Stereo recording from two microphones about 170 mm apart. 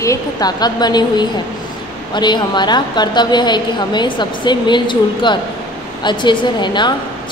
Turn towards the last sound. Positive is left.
turn(degrees=25)  # may be behind; listen again after turning